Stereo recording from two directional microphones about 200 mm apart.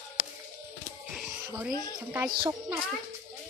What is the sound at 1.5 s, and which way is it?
Music, 10° right (ahead or behind).